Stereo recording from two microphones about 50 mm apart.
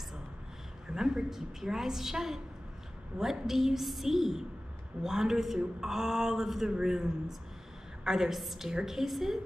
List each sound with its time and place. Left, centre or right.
0.8 s a woman's voice: centre